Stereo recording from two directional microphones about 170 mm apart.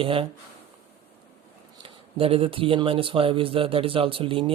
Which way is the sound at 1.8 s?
35° right (ahead or behind).